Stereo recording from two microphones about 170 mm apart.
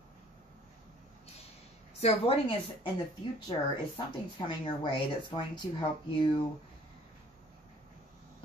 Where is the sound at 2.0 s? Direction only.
35° left (ahead or behind).